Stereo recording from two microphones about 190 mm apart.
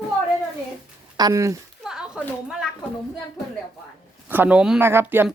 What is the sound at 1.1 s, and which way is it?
Speech, 20° right (ahead or behind).